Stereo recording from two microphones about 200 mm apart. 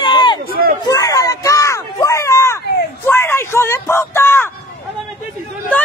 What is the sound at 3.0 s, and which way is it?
Speech, 10° left (ahead or behind).